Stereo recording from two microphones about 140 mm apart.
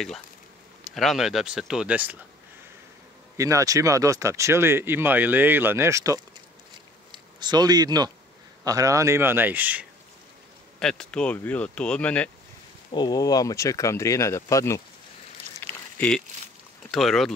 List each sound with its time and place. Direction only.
0.8 s speech: centre (ahead or behind)
3.3 s a man's voice: 20° right (ahead or behind)
10.8 s speech: 5° left (ahead or behind)
12.9 s speech: 30° left (ahead or behind)
15.6 s a sound: 15° left (ahead or behind)
16.0 s speech: 5° left (ahead or behind)